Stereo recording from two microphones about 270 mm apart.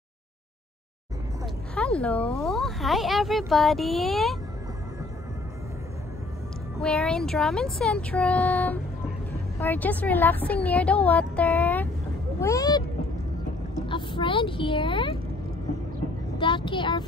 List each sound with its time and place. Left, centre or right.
1.4 s speech: centre
6.8 s a woman's voice: centre
13.8 s a woman's voice: centre
16.3 s a woman's voice: centre